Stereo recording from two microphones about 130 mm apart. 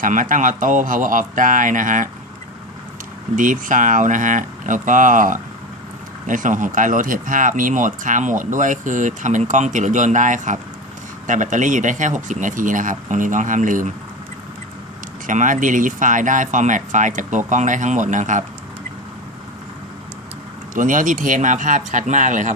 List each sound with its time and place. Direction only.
0.0 s speech: 90° right
3.3 s speech: 90° right
15.3 s speech: 90° right
20.7 s speech: 90° right